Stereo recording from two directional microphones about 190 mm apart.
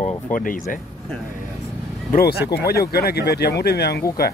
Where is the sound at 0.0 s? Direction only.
45° left (ahead or behind).